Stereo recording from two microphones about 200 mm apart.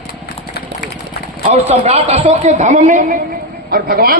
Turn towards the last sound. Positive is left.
turn(degrees=-45)  # may be behind; listen again after turning